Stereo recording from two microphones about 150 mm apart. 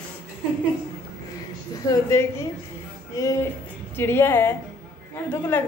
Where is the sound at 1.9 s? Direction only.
20° left (ahead or behind).